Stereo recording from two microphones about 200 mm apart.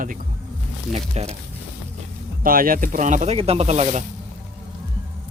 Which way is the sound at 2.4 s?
45° right (ahead or behind).